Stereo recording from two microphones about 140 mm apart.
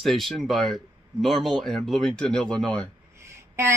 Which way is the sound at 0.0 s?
Centre (ahead or behind).